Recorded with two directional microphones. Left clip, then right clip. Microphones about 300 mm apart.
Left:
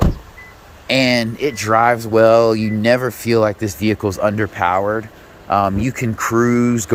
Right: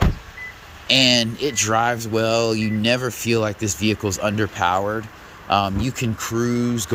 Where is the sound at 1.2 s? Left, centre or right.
Left.